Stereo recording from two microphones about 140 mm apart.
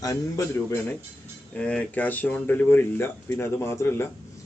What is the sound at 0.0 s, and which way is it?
A man's voice, 25° left (ahead or behind).